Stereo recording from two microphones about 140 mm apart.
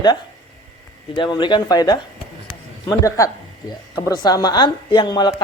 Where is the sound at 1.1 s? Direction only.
35° left (ahead or behind).